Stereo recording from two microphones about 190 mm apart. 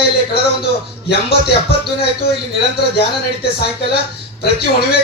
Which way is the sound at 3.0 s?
55° left (ahead or behind).